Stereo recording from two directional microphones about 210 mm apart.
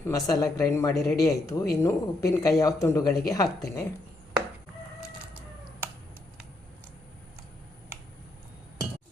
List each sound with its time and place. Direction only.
0.0 s speech: 15° left (ahead or behind)